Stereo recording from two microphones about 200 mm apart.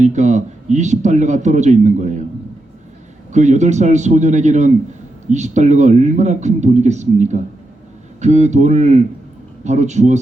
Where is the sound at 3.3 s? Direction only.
35° right (ahead or behind).